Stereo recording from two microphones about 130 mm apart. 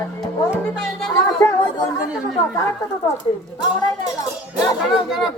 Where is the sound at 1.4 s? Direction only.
25° left (ahead or behind).